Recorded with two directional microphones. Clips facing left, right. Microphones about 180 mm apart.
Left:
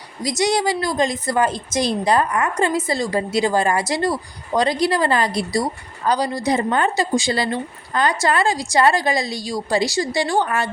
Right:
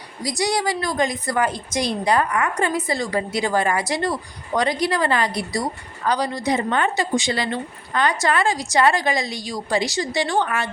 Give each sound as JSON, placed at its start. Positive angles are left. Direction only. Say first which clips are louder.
{"t": 0.2, "sound": "a woman's voice", "louder": "left 3 dB", "side_deg": 20}